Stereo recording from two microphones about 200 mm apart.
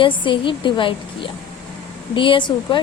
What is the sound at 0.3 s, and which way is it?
A woman's voice, 25° left (ahead or behind).